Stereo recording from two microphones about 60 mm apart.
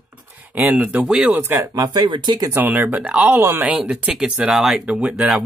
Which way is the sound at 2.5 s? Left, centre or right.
Right.